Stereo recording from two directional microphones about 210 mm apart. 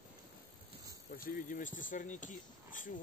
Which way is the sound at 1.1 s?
40° left (ahead or behind).